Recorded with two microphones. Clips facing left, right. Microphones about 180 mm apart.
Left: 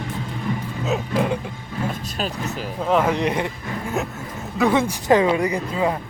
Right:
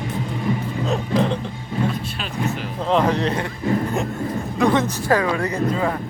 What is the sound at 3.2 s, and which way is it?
Speech, 15° left (ahead or behind).